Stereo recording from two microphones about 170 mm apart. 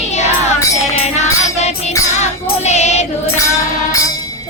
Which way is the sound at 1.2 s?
40° left (ahead or behind).